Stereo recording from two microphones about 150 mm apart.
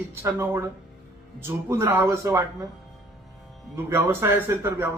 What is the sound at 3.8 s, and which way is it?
Speech, 15° right (ahead or behind).